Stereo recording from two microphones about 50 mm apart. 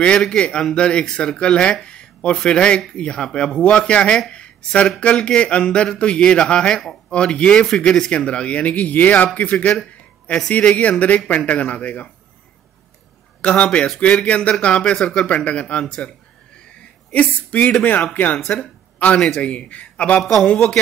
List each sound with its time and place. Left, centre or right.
0.0 s speech: centre
1.9 s a sound: centre
2.3 s speech: centre
13.4 s speech: left
15.0 s speech: centre
15.2 s speech: left
17.1 s speech: left
20.2 s speech: centre